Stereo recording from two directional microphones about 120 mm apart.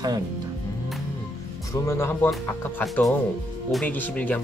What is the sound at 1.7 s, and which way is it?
Speech, 20° left (ahead or behind).